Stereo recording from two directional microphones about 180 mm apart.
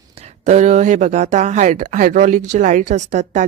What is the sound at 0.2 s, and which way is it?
A woman's voice, 40° right (ahead or behind).